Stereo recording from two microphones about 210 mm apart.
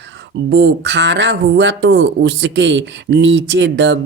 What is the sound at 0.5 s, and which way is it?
Speech, 55° right (ahead or behind).